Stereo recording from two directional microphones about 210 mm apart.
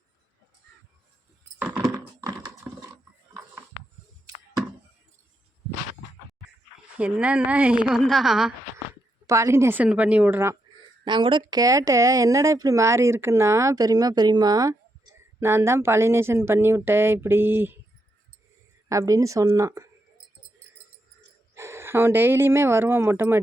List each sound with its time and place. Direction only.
1.5 s typing: 10° right (ahead or behind)
7.0 s a woman's voice: 5° right (ahead or behind)
9.2 s speech: 15° right (ahead or behind)
11.0 s speech: 25° right (ahead or behind)
18.9 s speech: 15° right (ahead or behind)
21.5 s speech: 15° right (ahead or behind)